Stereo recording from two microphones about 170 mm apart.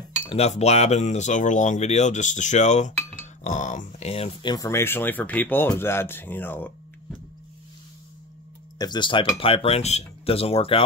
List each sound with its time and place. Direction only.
0.3 s speech: 40° left (ahead or behind); by 7.2 s 10° left (ahead or behind)
8.7 s speech: 25° left (ahead or behind)